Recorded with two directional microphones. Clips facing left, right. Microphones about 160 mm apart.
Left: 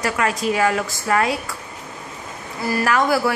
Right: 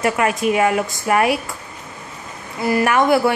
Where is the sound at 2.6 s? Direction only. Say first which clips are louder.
Right 3 dB; 20° right (ahead or behind).